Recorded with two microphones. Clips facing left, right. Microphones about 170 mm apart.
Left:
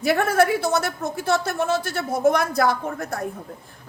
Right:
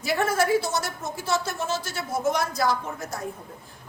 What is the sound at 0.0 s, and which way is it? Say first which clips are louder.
A woman's voice: left 5 dB; 60° left (ahead or behind).